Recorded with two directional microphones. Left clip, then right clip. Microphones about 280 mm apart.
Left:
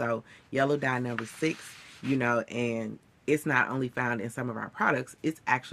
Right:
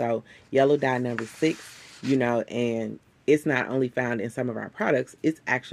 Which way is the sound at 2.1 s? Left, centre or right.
Centre.